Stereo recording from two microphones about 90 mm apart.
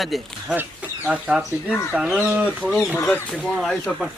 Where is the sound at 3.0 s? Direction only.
15° left (ahead or behind).